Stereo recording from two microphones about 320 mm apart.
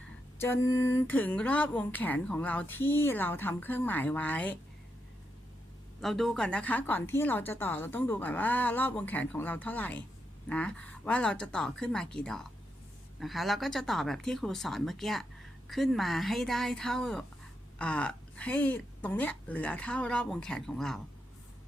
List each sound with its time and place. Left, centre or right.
0.3 s speech: centre
6.0 s speech: centre